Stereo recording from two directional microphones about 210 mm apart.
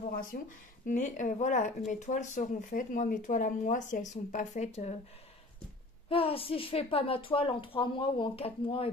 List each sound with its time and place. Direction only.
0.3 s speech: 40° left (ahead or behind)
6.0 s a woman's voice: 25° left (ahead or behind)